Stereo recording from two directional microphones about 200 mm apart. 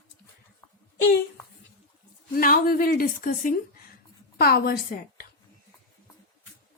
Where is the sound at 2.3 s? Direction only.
45° left (ahead or behind).